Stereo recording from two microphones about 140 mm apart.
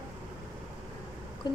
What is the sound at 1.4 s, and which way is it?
Speech, 30° left (ahead or behind).